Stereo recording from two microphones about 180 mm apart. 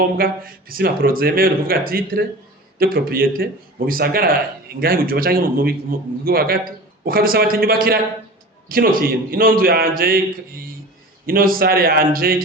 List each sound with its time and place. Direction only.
0.2 s a man's voice: 55° right (ahead or behind)